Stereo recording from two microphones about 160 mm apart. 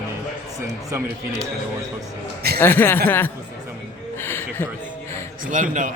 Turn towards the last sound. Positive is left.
turn(degrees=-55)  # may be behind; listen again after turning